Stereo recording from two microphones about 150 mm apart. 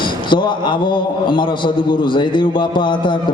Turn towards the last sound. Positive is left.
turn(degrees=30)  # may be behind; listen again after turning